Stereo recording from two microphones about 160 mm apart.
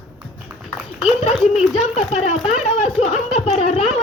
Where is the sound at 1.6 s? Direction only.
45° left (ahead or behind).